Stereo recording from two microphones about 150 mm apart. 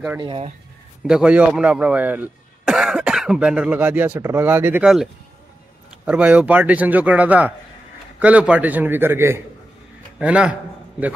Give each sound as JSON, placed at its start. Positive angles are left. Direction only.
{"t": 0.2, "sound": "speech", "side_deg": -35}
{"t": 1.0, "sound": "speech", "side_deg": -5}
{"t": 4.8, "sound": "a man's voice", "side_deg": 0}